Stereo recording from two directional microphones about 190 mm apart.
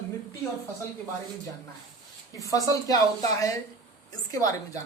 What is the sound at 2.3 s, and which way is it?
A man's voice, 15° left (ahead or behind).